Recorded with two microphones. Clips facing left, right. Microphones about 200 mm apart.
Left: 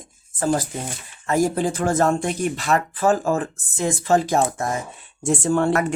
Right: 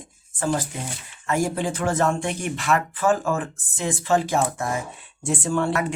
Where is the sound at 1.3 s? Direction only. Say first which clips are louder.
Left 4 dB; 40° left (ahead or behind).